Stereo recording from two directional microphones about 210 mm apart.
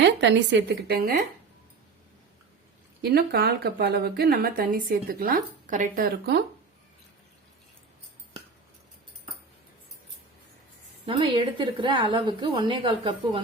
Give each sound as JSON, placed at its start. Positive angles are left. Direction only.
{"t": 0.0, "sound": "a woman's voice", "side_deg": -55}
{"t": 3.0, "sound": "a woman's voice", "side_deg": -45}
{"t": 11.0, "sound": "a woman's voice", "side_deg": -25}